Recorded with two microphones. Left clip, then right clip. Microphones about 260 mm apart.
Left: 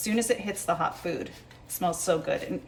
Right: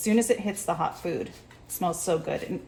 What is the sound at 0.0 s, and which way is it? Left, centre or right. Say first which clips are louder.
Speech: right 3 dB; centre.